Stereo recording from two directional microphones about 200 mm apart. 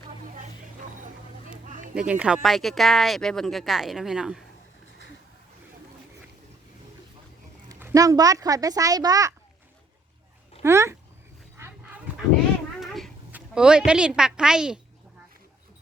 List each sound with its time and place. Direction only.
1.6 s a sound: 40° right (ahead or behind)
2.0 s speech: 5° right (ahead or behind)
7.7 s a child's voice: 15° right (ahead or behind)
10.6 s speech: 15° right (ahead or behind)
12.1 s dog: 5° right (ahead or behind)
12.8 s a woman's voice: centre (ahead or behind)